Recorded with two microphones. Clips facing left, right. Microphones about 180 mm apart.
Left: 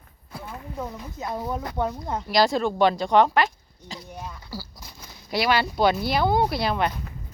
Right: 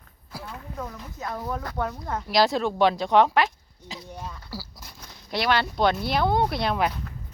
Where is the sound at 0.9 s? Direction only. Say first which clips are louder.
Left 2 dB; 15° left (ahead or behind).